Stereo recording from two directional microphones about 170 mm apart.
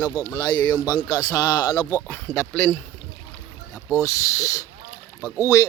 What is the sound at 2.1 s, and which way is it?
Speech, 15° left (ahead or behind).